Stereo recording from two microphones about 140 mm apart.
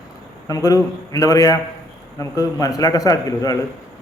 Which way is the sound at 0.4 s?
25° left (ahead or behind).